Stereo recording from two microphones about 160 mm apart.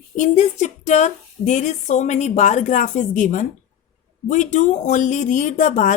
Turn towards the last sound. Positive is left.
turn(degrees=50)  # may be behind; listen again after turning